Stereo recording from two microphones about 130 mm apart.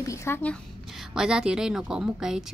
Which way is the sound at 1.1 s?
5° right (ahead or behind).